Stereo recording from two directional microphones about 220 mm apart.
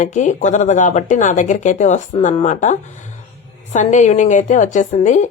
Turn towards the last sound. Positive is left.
turn(degrees=35)  # may be behind; listen again after turning